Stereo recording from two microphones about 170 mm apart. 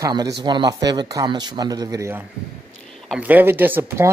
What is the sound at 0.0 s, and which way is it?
Speech, 25° right (ahead or behind).